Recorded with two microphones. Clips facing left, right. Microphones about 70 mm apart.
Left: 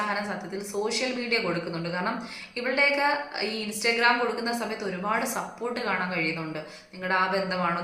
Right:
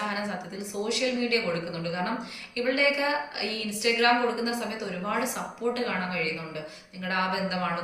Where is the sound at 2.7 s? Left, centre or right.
Left.